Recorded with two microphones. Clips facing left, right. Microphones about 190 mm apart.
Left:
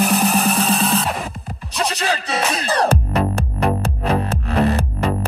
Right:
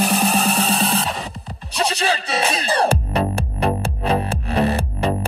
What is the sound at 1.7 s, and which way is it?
Music, 30° right (ahead or behind).